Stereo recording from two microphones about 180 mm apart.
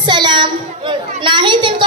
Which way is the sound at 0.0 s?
25° right (ahead or behind).